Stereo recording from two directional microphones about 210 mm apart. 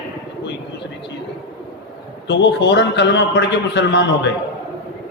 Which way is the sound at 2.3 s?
55° left (ahead or behind).